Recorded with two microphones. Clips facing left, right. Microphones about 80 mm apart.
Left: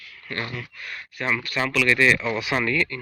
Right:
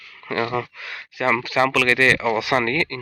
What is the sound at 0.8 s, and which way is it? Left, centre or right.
Speech, right.